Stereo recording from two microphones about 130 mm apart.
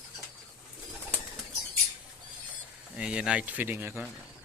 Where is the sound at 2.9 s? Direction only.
5° right (ahead or behind).